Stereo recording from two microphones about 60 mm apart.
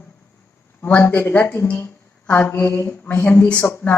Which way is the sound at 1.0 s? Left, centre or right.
Left.